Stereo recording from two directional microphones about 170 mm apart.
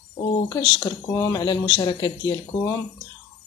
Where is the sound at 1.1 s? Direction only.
20° left (ahead or behind).